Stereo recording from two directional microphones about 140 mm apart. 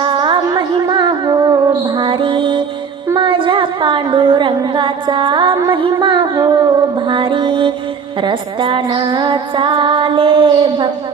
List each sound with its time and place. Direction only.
0.0 s music: 35° right (ahead or behind)
3.2 s a sound: 35° right (ahead or behind)
5.6 s female singing: 35° right (ahead or behind)
7.1 s mantra: 35° right (ahead or behind)
8.2 s female singing: 35° right (ahead or behind)